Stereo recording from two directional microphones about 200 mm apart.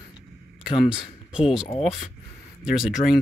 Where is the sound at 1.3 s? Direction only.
5° right (ahead or behind).